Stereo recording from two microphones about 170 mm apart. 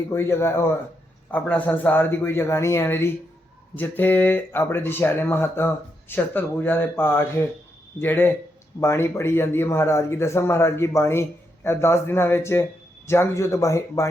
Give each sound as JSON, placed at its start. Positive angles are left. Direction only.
{"t": 0.1, "sound": "speech", "side_deg": 15}